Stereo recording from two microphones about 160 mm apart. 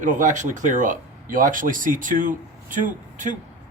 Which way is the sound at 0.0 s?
55° right (ahead or behind).